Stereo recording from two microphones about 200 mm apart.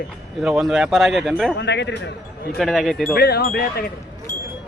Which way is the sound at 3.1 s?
50° left (ahead or behind).